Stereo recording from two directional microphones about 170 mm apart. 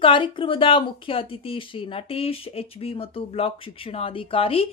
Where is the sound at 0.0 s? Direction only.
30° left (ahead or behind).